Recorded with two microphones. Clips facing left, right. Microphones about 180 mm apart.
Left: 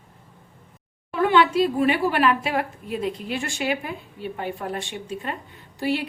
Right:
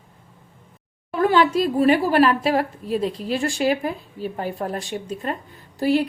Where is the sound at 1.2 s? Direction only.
40° right (ahead or behind).